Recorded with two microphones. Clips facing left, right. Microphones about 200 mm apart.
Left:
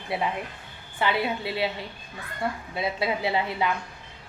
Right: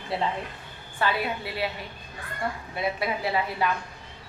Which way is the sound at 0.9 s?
20° left (ahead or behind).